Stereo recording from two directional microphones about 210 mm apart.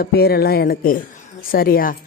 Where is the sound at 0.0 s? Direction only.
45° left (ahead or behind).